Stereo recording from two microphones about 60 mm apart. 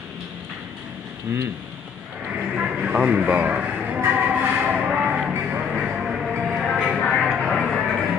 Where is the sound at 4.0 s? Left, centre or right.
Right.